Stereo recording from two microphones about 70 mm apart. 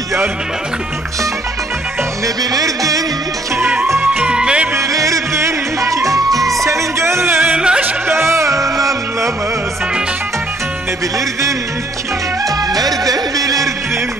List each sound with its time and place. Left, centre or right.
2.2 s music: right
3.5 s music: right
4.2 s music: centre
4.7 s music: right
7.4 s music: centre
8.1 s music: right
12.4 s music: right